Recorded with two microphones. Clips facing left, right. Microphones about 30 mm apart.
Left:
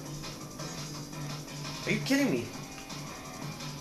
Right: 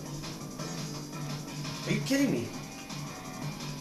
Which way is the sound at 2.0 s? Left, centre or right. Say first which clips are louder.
Even; centre.